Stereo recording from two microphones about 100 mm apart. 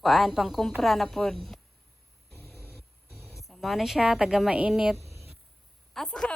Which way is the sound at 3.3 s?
Centre (ahead or behind).